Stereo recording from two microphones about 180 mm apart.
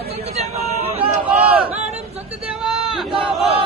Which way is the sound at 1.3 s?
5° right (ahead or behind).